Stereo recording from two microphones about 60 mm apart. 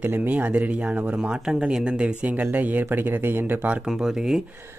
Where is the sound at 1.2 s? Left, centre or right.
Centre; by 3.7 s right.